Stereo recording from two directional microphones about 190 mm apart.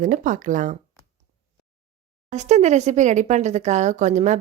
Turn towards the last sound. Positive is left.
turn(degrees=-40)  # may be behind; listen again after turning